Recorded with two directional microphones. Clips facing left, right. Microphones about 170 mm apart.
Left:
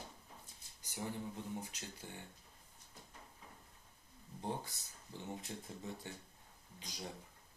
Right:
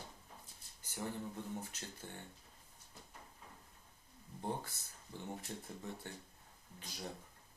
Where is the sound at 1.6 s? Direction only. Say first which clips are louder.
Even; 10° left (ahead or behind).